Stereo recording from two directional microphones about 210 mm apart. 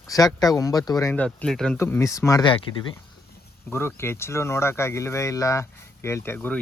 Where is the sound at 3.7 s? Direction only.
10° left (ahead or behind).